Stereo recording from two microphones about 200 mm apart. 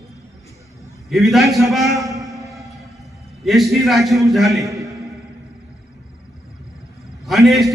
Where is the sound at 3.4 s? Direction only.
Centre (ahead or behind).